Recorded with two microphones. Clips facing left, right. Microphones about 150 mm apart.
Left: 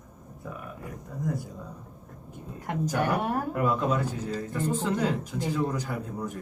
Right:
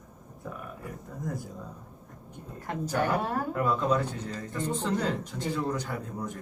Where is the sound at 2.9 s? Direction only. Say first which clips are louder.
Even; 10° left (ahead or behind).